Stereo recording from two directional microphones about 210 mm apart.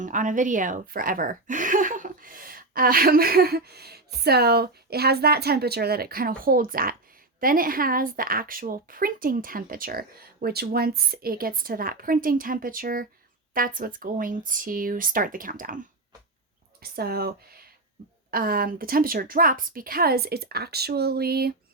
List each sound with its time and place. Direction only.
0.0 s a woman's voice: 35° right (ahead or behind)
16.8 s a woman's voice: 45° right (ahead or behind)